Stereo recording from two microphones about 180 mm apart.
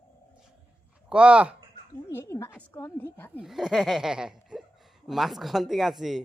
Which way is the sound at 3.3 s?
5° right (ahead or behind).